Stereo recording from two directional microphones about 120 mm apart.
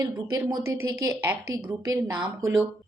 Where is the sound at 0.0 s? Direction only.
30° right (ahead or behind).